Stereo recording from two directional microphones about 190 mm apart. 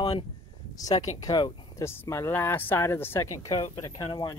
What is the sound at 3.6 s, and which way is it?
Speech, 25° left (ahead or behind).